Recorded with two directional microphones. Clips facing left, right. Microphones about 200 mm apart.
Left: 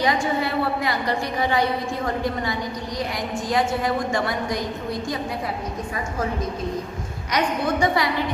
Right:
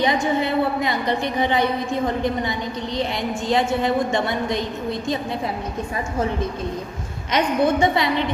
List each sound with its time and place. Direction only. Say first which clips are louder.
0.0 s a woman's voice: right 2 dB; 20° right (ahead or behind)
7.3 s a woman's voice: right 4 dB; 25° right (ahead or behind)